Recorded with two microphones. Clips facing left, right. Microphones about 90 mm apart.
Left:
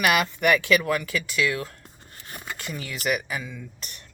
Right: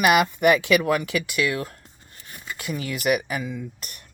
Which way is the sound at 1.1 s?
55° right (ahead or behind).